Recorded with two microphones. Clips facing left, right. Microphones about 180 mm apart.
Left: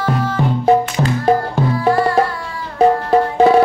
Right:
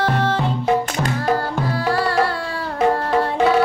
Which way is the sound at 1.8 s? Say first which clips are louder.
Left 6 dB; 25° left (ahead or behind).